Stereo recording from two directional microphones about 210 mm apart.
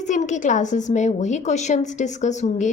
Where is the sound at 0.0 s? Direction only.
35° left (ahead or behind).